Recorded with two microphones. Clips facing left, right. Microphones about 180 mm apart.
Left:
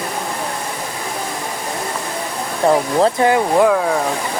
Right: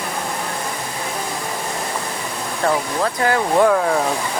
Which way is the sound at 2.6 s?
20° left (ahead or behind).